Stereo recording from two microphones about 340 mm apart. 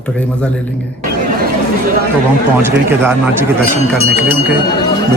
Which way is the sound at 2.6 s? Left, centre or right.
Centre.